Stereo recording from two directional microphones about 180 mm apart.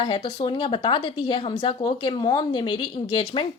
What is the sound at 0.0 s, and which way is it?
Speech, 30° left (ahead or behind).